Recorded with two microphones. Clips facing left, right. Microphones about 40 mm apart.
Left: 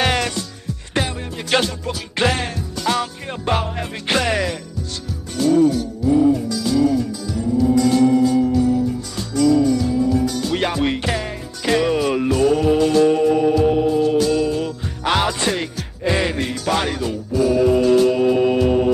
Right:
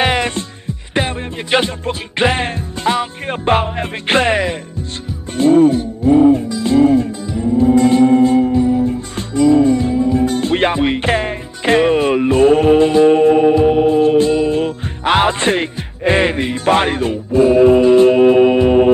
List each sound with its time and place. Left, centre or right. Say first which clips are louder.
0.0 s music: right 4 dB; right
0.3 s music: right 3 dB; right